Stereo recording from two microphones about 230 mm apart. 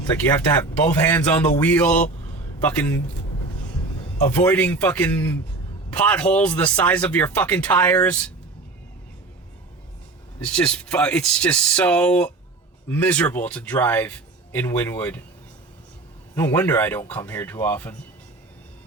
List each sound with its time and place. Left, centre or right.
0.3 s speech: centre
4.4 s speech: centre
10.4 s speech: centre
16.3 s speech: centre